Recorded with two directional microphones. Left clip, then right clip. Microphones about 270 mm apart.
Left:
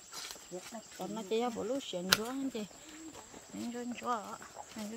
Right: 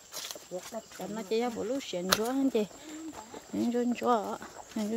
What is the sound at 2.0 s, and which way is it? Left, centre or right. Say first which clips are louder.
Speech: right 4 dB; centre.